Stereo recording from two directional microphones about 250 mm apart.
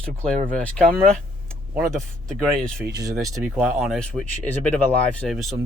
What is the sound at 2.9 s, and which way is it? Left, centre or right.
Speech, centre.